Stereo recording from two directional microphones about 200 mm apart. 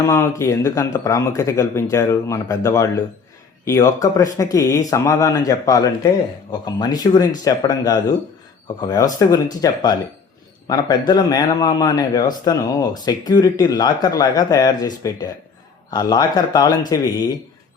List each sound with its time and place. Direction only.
0.0 s speech: 15° left (ahead or behind)